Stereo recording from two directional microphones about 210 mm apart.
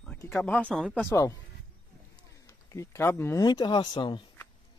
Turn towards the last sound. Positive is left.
turn(degrees=20)  # may be behind; listen again after turning